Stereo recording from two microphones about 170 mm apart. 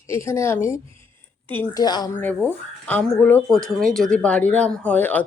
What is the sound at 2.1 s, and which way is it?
Speech, 10° left (ahead or behind).